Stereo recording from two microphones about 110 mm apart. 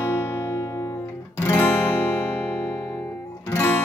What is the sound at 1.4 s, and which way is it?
Guitar, 20° left (ahead or behind).